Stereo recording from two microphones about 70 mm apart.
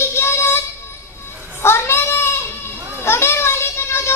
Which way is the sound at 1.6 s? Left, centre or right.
Left.